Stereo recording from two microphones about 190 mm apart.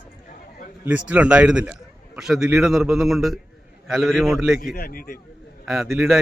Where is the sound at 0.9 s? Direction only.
5° right (ahead or behind).